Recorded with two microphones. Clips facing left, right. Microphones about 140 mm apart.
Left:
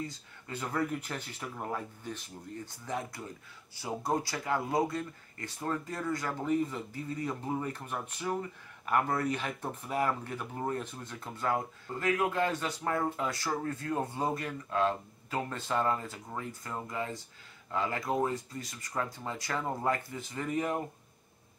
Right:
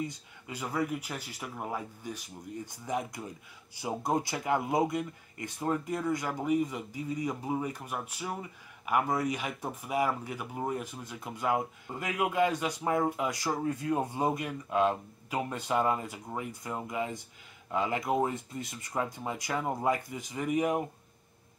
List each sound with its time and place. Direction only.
0.0 s speech: 10° right (ahead or behind)